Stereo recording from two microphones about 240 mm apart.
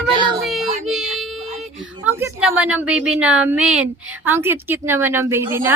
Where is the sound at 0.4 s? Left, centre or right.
Centre.